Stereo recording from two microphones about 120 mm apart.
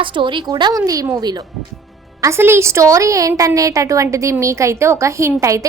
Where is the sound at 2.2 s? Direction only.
20° right (ahead or behind).